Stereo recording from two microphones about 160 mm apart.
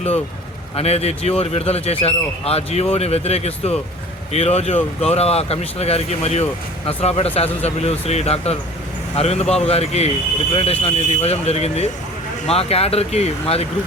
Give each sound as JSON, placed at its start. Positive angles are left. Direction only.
{"t": 0.8, "sound": "speech", "side_deg": 40}